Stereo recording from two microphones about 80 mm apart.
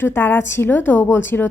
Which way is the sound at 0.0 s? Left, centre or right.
Left.